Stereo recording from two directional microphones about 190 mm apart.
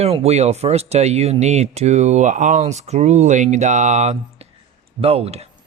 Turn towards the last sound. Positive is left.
turn(degrees=-30)  # may be behind; listen again after turning